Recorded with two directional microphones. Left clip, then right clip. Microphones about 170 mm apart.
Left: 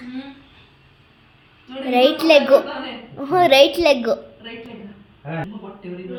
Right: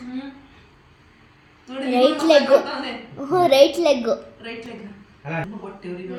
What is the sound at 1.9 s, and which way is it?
A child's voice, 15° right (ahead or behind).